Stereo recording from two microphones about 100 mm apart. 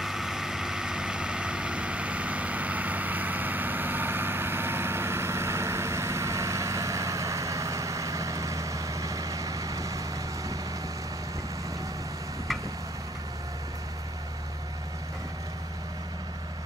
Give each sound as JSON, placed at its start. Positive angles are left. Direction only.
{"t": 0.0, "sound": "vehicle", "side_deg": -5}